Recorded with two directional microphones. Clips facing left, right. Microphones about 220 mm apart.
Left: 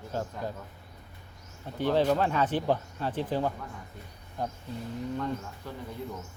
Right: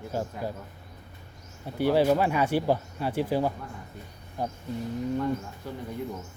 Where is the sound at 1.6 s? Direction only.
10° right (ahead or behind).